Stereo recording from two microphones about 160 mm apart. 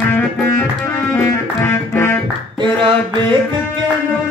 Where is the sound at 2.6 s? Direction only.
30° right (ahead or behind).